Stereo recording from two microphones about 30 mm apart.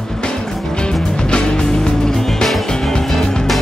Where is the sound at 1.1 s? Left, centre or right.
Left; by 3.1 s centre.